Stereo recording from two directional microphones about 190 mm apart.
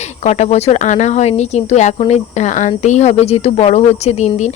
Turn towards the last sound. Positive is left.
turn(degrees=35)  # may be behind; listen again after turning